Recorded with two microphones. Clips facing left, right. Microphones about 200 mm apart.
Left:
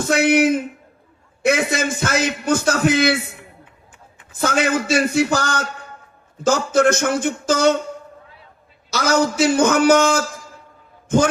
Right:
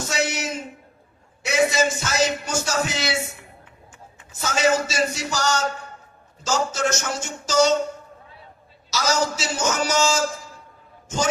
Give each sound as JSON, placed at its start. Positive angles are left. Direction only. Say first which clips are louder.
{"t": 0.0, "sound": "a man's voice", "louder": "left 11 dB", "side_deg": 55}
{"t": 8.9, "sound": "a man's voice", "louder": "left 5 dB", "side_deg": 55}